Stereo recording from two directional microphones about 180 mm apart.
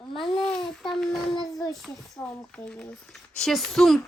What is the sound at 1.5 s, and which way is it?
Speech, 20° left (ahead or behind).